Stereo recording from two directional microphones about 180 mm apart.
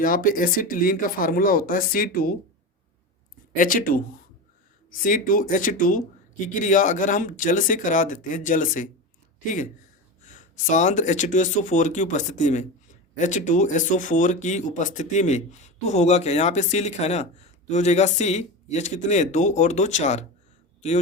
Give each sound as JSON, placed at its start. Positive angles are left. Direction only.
{"t": 0.0, "sound": "speech", "side_deg": 50}
{"t": 3.5, "sound": "speech", "side_deg": 50}
{"t": 10.2, "sound": "speech", "side_deg": 45}